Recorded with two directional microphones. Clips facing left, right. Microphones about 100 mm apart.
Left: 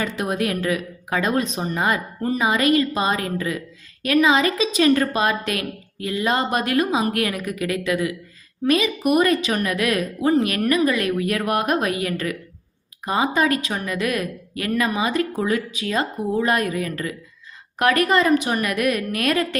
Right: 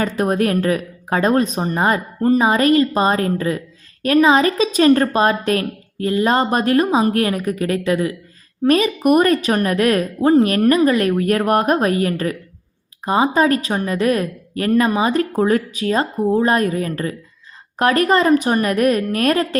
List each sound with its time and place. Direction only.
0.0 s a woman's voice: 40° right (ahead or behind)